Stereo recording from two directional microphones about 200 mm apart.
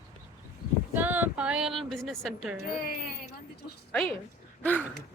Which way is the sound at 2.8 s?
50° left (ahead or behind).